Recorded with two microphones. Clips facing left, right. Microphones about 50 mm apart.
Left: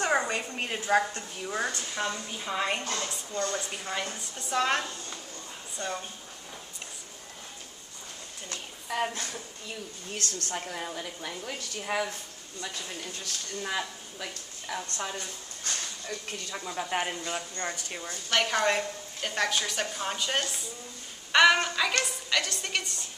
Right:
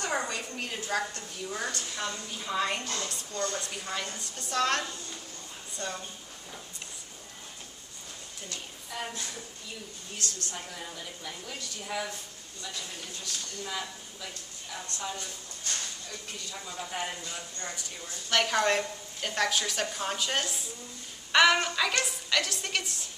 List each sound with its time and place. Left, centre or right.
0.0 s a woman's voice: left
8.5 s speech: left
16.4 s a woman's voice: left
18.3 s a woman's voice: centre